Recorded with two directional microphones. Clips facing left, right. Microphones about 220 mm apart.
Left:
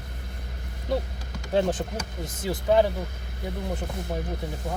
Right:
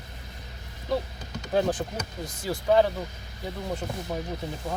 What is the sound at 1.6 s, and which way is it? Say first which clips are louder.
Speech: left 1 dB; 20° left (ahead or behind).